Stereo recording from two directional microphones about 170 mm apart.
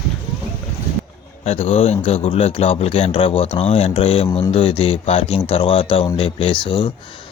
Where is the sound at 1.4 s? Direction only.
35° left (ahead or behind).